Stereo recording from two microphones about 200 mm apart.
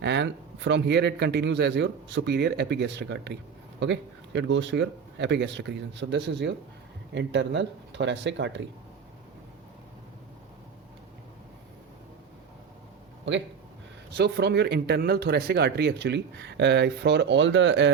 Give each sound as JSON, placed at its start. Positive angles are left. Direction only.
{"t": 0.0, "sound": "speech", "side_deg": -60}
{"t": 14.1, "sound": "speech", "side_deg": -60}